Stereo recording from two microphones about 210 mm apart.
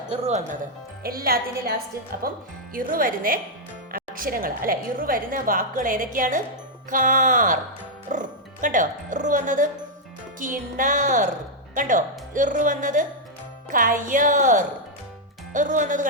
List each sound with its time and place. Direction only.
0.1 s a woman's voice: 30° right (ahead or behind)
1.0 s speech: 45° right (ahead or behind)
2.7 s a woman's voice: 40° right (ahead or behind)